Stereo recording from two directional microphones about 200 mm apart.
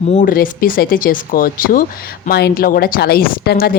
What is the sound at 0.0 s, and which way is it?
A woman's voice, 35° left (ahead or behind).